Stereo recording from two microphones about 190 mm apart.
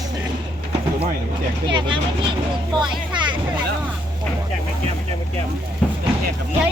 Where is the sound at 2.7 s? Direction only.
25° right (ahead or behind).